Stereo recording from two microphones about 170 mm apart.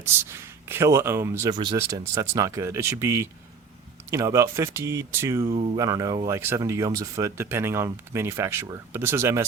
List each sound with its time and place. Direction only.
0.0 s speech: 15° right (ahead or behind)
5.5 s speech: 35° right (ahead or behind)
5.7 s speech: 20° right (ahead or behind)